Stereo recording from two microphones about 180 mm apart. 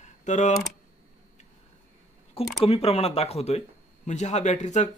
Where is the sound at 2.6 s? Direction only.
35° left (ahead or behind).